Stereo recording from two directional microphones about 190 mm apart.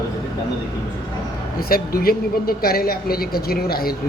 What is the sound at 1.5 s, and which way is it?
A woman's voice, 50° left (ahead or behind).